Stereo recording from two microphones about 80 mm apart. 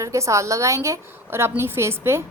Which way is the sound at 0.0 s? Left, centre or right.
Right.